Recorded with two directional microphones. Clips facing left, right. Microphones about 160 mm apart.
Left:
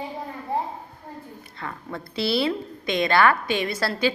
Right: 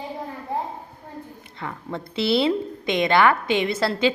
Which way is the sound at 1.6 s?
20° right (ahead or behind).